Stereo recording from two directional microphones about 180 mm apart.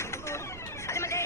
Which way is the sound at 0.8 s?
15° left (ahead or behind).